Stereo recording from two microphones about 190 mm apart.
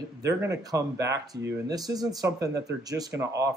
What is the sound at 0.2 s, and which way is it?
Speech, 15° right (ahead or behind).